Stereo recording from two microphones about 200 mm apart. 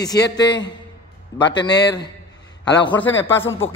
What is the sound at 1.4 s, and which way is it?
Speech, 20° left (ahead or behind).